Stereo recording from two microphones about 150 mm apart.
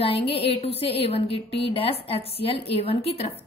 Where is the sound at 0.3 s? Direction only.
40° left (ahead or behind).